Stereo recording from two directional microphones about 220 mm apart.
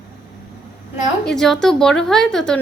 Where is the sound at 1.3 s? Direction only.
Centre (ahead or behind).